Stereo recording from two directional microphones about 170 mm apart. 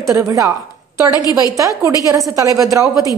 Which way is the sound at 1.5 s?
20° right (ahead or behind).